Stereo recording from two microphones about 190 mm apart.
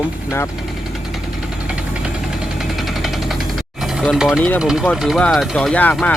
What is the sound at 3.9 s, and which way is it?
Speech, centre (ahead or behind).